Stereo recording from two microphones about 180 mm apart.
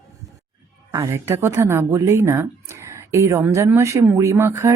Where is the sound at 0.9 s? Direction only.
15° right (ahead or behind).